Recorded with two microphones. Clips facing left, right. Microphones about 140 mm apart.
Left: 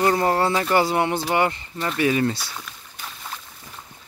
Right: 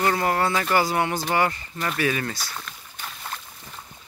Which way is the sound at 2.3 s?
5° left (ahead or behind).